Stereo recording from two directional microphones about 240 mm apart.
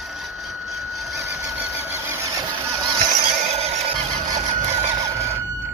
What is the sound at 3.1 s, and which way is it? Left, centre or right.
Neigh, right.